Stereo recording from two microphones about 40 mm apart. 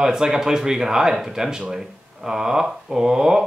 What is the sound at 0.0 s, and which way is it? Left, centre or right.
Mantra, centre.